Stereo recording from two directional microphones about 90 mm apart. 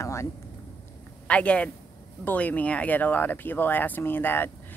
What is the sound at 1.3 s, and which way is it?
A man's voice, 15° left (ahead or behind).